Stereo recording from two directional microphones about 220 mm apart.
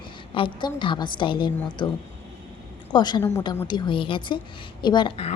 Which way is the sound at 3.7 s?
20° left (ahead or behind).